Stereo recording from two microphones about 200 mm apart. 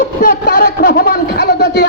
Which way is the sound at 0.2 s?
45° left (ahead or behind).